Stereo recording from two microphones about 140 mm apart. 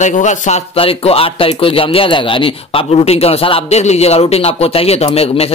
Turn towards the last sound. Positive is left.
turn(degrees=45)  # may be behind; listen again after turning